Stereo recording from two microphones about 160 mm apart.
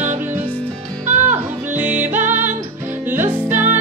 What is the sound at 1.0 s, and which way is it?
Music, 15° right (ahead or behind).